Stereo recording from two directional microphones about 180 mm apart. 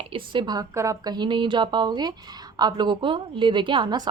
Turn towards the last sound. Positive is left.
turn(degrees=-25)  # may be behind; listen again after turning